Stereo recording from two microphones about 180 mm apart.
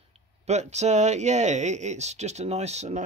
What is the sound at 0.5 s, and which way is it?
Speech, 40° right (ahead or behind).